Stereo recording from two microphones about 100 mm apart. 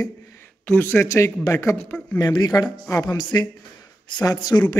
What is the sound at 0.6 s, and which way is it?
Speech, 20° left (ahead or behind).